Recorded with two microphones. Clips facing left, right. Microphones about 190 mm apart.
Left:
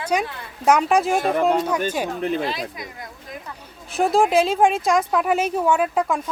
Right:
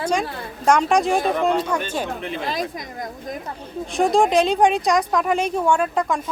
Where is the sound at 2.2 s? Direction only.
40° left (ahead or behind).